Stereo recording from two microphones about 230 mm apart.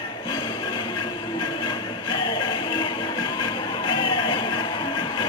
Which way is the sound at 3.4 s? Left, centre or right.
Left.